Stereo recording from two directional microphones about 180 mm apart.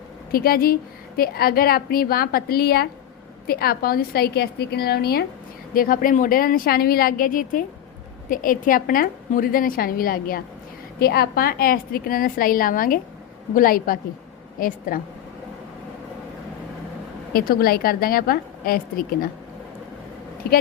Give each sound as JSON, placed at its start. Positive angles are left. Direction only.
{"t": 0.3, "sound": "a woman's voice", "side_deg": 55}
{"t": 17.3, "sound": "a woman's voice", "side_deg": 55}
{"t": 20.4, "sound": "a woman's voice", "side_deg": 60}